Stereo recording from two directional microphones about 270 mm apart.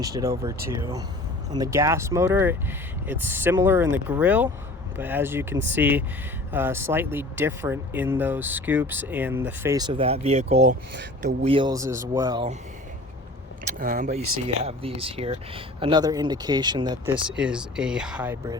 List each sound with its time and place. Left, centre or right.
0.0 s speech: centre
13.7 s speech: right
14.2 s speech: right
14.4 s speech: right
17.2 s speech: centre